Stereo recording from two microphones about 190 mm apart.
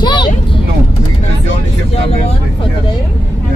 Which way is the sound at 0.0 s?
25° left (ahead or behind).